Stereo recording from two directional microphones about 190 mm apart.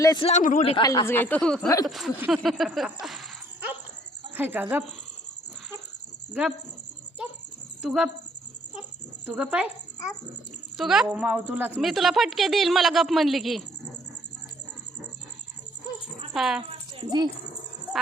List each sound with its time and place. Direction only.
0.0 s speech: 20° left (ahead or behind)
0.3 s speech: 40° left (ahead or behind)
0.8 s speech: 20° left (ahead or behind)
1.6 s speech: 20° left (ahead or behind)
1.9 s speech: centre (ahead or behind)
7.8 s speech: 5° right (ahead or behind)
9.2 s speech: 5° right (ahead or behind)
10.8 s a woman's voice: centre (ahead or behind)
16.3 s a woman's voice: centre (ahead or behind)
16.9 s a child's voice: 25° right (ahead or behind)